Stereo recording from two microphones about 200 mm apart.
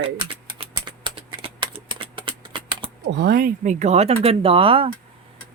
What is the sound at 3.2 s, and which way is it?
Speech, 50° right (ahead or behind).